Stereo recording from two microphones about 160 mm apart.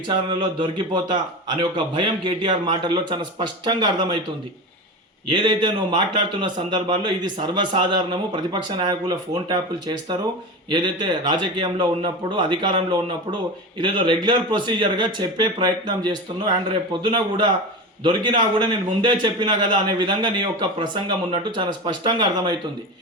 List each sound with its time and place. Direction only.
0.1 s a man's voice: 25° right (ahead or behind)
5.3 s a man's voice: 30° right (ahead or behind)